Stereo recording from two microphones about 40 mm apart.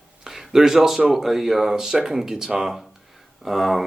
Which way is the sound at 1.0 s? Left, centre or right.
Centre.